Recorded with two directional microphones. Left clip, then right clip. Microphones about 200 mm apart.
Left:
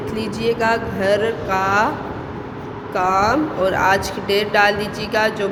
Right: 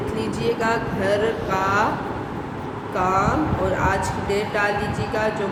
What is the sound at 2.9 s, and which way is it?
Speech, 40° left (ahead or behind).